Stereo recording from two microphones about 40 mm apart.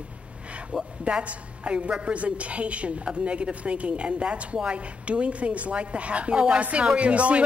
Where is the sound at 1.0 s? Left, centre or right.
Right.